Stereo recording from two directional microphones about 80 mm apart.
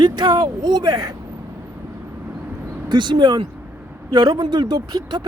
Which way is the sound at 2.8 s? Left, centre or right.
Right.